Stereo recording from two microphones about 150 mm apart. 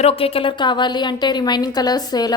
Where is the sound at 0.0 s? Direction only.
40° left (ahead or behind).